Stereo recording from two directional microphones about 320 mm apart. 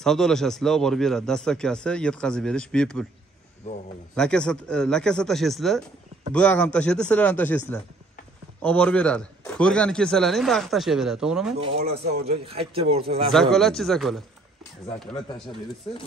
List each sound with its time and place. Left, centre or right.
0.0 s a man's voice: centre
4.1 s a man's voice: centre
11.6 s a man's voice: centre
13.3 s a man's voice: centre